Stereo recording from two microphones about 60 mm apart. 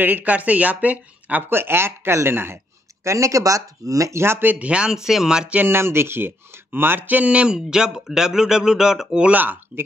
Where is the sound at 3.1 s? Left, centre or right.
Right.